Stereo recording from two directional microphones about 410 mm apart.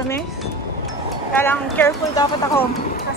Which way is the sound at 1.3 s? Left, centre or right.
Centre.